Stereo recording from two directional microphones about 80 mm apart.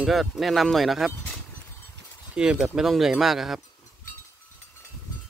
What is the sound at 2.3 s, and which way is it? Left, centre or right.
Speech, centre.